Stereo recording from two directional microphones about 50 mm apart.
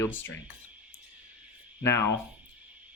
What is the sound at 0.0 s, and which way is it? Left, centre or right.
Speech, left.